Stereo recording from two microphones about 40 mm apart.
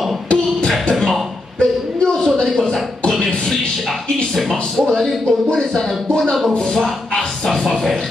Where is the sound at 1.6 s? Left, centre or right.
Left.